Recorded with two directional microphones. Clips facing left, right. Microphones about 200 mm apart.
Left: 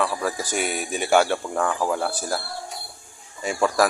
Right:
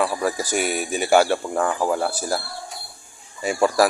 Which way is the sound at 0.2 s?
5° right (ahead or behind).